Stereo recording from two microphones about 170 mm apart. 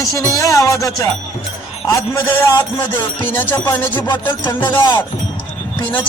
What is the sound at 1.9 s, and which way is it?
Music, 15° left (ahead or behind).